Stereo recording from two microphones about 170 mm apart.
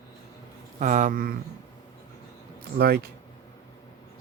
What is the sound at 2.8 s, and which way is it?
Speech, 65° right (ahead or behind).